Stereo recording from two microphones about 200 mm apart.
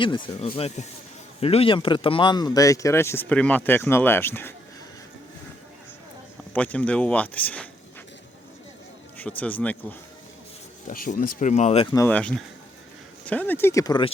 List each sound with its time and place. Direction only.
0.0 s speech: 25° left (ahead or behind); by 4.5 s 10° left (ahead or behind)
6.5 s speech: 5° left (ahead or behind)
9.1 s speech: 5° left (ahead or behind)
10.8 s speech: 45° left (ahead or behind)
11.9 s speech: 10° left (ahead or behind)